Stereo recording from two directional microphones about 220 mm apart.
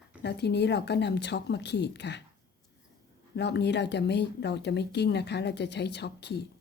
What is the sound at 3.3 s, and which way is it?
Speech, 50° left (ahead or behind).